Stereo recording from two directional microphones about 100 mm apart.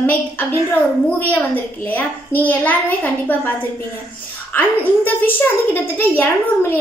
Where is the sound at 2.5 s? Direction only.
15° left (ahead or behind).